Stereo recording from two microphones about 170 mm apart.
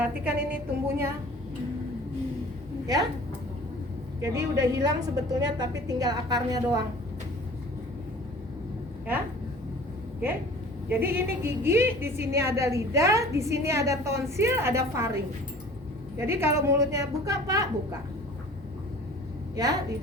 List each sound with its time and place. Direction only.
0.0 s a woman's voice: 10° right (ahead or behind)
2.8 s a woman's voice: 20° right (ahead or behind)
4.2 s a woman's voice: 20° right (ahead or behind)
10.8 s a woman's voice: 10° right (ahead or behind)